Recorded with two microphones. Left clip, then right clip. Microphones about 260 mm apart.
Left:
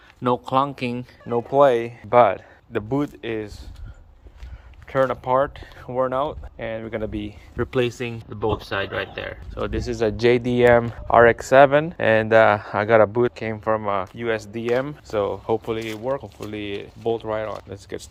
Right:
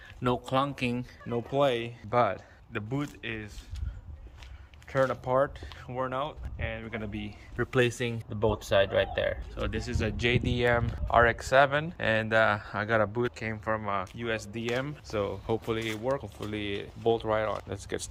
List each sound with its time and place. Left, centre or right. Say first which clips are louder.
0.2 s speech: left 8 dB; centre
4.9 s speech: left 7 dB; centre
5.9 s speech: left 10 dB; left; by 9.3 s centre
9.6 s speech: left 9 dB; centre